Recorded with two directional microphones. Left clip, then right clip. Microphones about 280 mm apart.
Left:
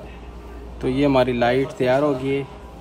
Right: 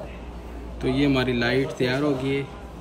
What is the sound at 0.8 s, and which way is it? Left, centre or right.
Speech, centre.